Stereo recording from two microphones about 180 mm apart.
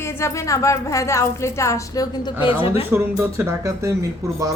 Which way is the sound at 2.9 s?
15° right (ahead or behind).